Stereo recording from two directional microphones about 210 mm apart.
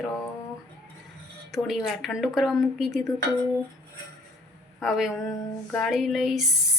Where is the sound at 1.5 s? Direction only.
Centre (ahead or behind).